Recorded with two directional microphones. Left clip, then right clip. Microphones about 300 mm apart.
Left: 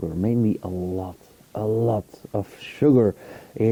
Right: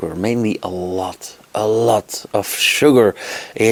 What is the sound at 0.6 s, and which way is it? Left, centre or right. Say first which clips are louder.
Speech: right 8 dB; right.